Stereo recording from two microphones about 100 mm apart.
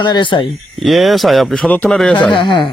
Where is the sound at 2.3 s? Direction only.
55° left (ahead or behind).